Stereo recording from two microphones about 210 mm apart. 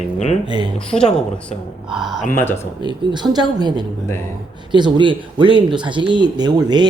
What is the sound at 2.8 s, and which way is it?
Speech, 20° right (ahead or behind).